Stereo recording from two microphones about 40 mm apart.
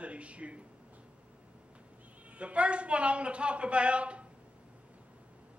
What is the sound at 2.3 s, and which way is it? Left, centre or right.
A man's voice, right.